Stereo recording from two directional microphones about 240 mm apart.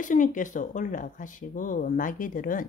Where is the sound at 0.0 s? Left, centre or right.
Left.